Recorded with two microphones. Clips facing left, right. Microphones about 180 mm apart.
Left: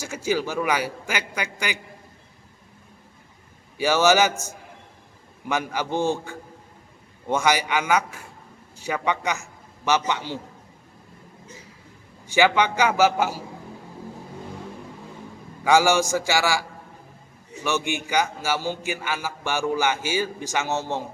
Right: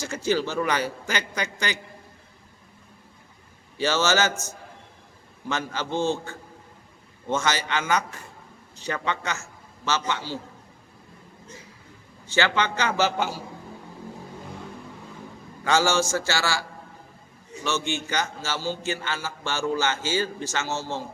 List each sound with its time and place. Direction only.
0.0 s a man's voice: 10° left (ahead or behind)
3.8 s a man's voice: 10° left (ahead or behind)
12.2 s a man's voice: 15° left (ahead or behind)
15.6 s a man's voice: 15° left (ahead or behind)